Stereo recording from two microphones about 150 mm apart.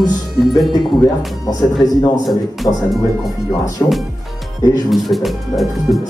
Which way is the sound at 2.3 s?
Centre (ahead or behind).